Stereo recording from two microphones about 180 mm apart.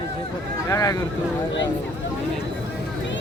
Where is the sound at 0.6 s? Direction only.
15° left (ahead or behind).